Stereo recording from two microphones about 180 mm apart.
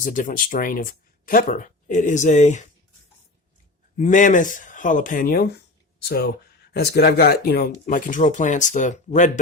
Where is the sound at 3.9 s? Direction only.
45° left (ahead or behind).